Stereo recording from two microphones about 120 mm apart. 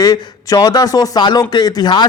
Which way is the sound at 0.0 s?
35° left (ahead or behind).